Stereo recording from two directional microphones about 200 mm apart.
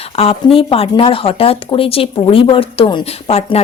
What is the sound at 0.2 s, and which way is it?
Speech, 30° left (ahead or behind).